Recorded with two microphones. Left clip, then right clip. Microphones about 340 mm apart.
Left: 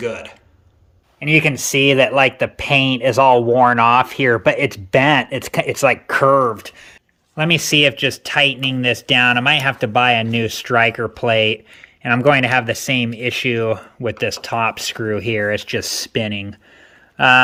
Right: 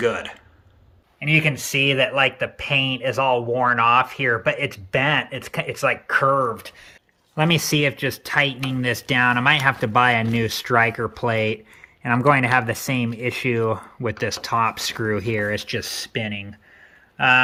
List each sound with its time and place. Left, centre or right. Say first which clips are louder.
0.0 s speech: right 2 dB; centre
1.2 s speech: left 5 dB; centre
6.6 s speech: left 4 dB; centre
7.3 s speech: left 5 dB; centre